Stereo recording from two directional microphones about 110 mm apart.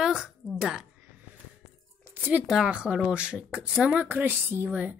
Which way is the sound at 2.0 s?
15° right (ahead or behind).